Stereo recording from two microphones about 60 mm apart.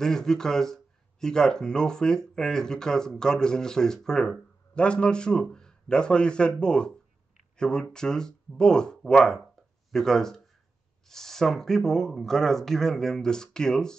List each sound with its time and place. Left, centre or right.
0.0 s speech: centre
4.7 s speech: centre